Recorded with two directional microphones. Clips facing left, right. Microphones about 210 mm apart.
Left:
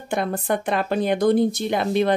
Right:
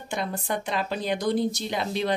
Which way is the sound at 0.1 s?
55° left (ahead or behind).